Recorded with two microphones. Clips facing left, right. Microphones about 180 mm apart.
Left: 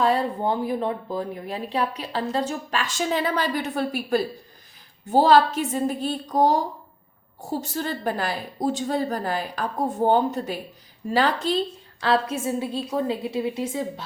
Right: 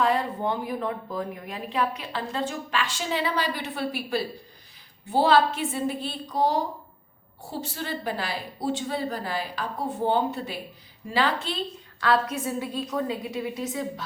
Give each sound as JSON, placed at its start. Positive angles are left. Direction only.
{"t": 0.0, "sound": "a woman's voice", "side_deg": 35}
{"t": 11.9, "sound": "a woman's voice", "side_deg": 25}